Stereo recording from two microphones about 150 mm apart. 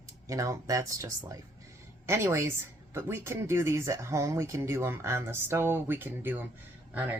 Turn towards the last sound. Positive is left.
turn(degrees=-10)  # may be behind; listen again after turning